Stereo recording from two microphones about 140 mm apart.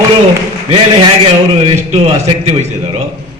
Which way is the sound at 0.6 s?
45° right (ahead or behind).